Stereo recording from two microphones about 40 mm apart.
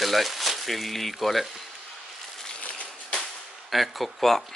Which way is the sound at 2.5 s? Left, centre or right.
Left.